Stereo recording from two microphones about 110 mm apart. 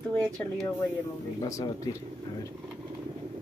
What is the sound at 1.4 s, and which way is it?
Speech, 30° left (ahead or behind).